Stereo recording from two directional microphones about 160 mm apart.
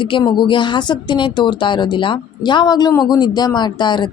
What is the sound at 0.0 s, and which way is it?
Speech, 30° left (ahead or behind).